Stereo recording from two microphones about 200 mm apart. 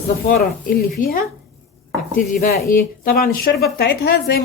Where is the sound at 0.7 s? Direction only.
45° left (ahead or behind).